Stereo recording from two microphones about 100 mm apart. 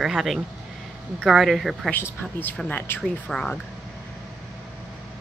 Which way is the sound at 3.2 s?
10° left (ahead or behind).